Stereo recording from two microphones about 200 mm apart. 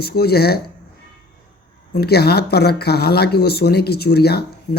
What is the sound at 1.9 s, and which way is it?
Speech, 55° left (ahead or behind).